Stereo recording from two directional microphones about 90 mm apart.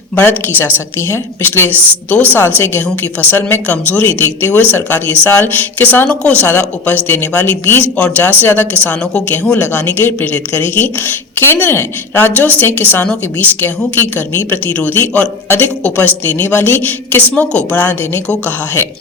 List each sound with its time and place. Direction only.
0.2 s a woman's voice: 25° left (ahead or behind)
7.9 s speech: 10° left (ahead or behind)
8.4 s a woman's voice: 20° left (ahead or behind)